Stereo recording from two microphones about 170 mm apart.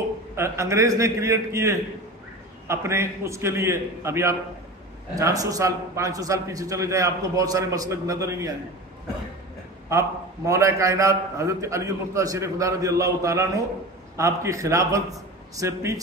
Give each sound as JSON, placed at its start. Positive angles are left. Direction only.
{"t": 0.4, "sound": "a man's voice", "side_deg": -15}
{"t": 9.8, "sound": "a man's voice", "side_deg": -20}